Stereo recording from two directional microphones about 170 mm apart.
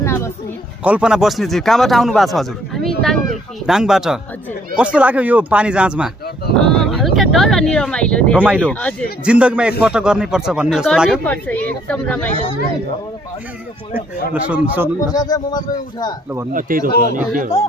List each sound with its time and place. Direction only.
0.0 s a sound: 15° left (ahead or behind)
0.8 s speech: 5° right (ahead or behind)
8.4 s speech: 10° right (ahead or behind); by 12.3 s 10° left (ahead or behind)
13.9 s speech: 10° right (ahead or behind)
15.1 s a man's voice: 20° left (ahead or behind)
16.5 s speech: 55° right (ahead or behind)